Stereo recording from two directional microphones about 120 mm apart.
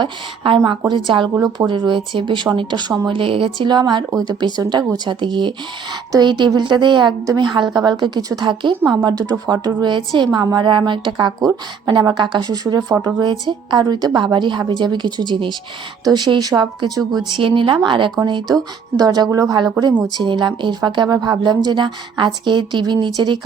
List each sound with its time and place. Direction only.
0.0 s speech: 40° right (ahead or behind)
18.5 s speech: 30° right (ahead or behind)